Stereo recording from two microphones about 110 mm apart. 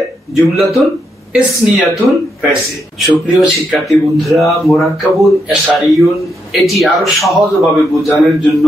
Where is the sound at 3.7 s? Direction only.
Centre (ahead or behind).